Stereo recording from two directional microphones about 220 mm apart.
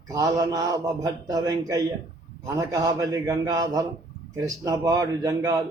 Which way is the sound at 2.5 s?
15° right (ahead or behind).